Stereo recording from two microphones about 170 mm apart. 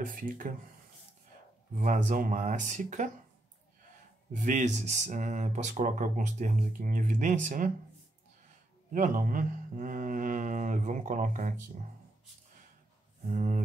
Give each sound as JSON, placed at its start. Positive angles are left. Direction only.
{"t": 0.0, "sound": "speech", "side_deg": -55}
{"t": 1.8, "sound": "speech", "side_deg": -45}
{"t": 4.4, "sound": "speech", "side_deg": -45}
{"t": 8.9, "sound": "speech", "side_deg": -50}
{"t": 13.3, "sound": "speech", "side_deg": -45}